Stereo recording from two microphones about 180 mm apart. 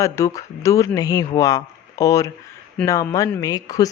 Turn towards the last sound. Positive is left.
turn(degrees=20)  # may be behind; listen again after turning